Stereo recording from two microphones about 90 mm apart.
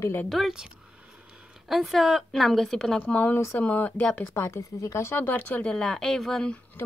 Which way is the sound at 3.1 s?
20° left (ahead or behind).